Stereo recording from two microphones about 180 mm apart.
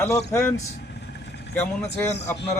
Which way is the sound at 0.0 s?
15° left (ahead or behind).